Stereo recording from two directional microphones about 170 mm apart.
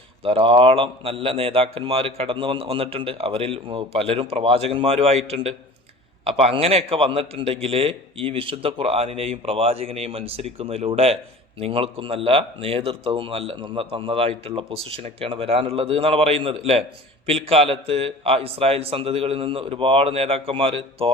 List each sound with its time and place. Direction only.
0.2 s speech: 30° right (ahead or behind)